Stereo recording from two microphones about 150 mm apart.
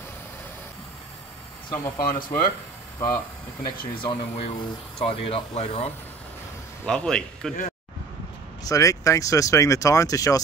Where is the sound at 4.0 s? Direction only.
35° left (ahead or behind).